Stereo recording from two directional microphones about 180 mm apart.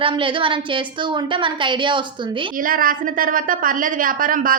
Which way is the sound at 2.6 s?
50° right (ahead or behind).